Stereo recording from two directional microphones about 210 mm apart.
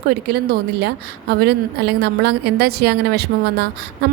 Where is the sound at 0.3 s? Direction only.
50° right (ahead or behind).